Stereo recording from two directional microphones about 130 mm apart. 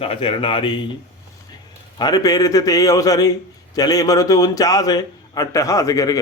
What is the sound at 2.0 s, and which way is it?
A man's voice, 30° left (ahead or behind).